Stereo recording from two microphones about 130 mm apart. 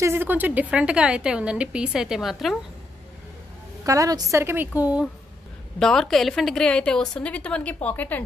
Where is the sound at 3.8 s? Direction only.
25° right (ahead or behind).